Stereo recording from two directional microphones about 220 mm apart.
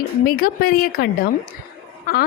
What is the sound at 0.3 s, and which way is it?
A woman's voice, 40° left (ahead or behind).